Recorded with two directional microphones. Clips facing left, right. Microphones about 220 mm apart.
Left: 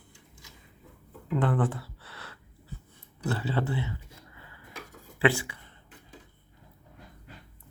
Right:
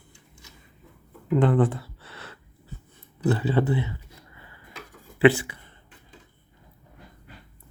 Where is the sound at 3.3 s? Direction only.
20° right (ahead or behind).